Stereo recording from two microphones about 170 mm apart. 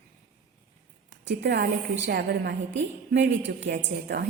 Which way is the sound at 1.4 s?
80° right.